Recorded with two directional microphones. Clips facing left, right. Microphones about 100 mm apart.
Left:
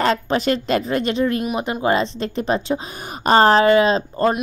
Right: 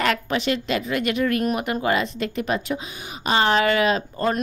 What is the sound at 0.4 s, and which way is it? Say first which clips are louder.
A woman's voice: left 4 dB; 40° left (ahead or behind).